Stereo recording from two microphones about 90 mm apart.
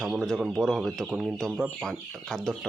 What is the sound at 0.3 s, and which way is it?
Speech, 5° right (ahead or behind).